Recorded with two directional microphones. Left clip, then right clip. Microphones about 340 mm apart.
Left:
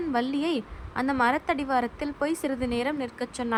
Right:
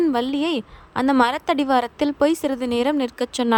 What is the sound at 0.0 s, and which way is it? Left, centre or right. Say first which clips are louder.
A woman's voice: right 7 dB; centre.